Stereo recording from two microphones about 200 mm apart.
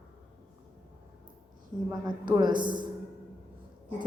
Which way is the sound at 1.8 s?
20° right (ahead or behind).